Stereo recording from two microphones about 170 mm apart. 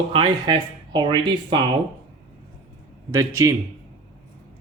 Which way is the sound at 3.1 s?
20° right (ahead or behind).